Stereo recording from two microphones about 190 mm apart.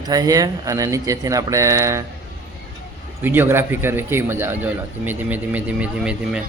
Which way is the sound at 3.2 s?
10° right (ahead or behind).